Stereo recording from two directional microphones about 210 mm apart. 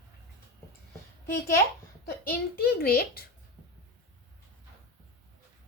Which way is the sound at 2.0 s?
45° left (ahead or behind).